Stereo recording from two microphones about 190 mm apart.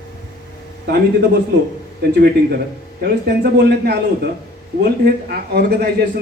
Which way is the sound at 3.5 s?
60° right (ahead or behind).